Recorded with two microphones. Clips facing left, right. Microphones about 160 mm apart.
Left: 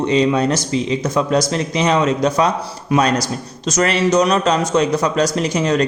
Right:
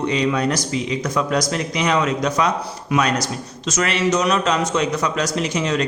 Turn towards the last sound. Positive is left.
turn(degrees=40)  # may be behind; listen again after turning